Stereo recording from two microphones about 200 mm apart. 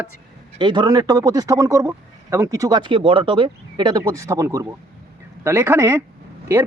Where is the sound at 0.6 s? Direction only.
25° right (ahead or behind).